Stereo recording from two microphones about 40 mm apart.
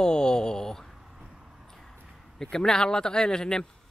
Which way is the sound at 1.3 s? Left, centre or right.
Centre.